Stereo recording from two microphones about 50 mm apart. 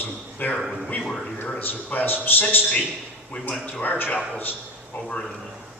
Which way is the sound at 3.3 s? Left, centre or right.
Left.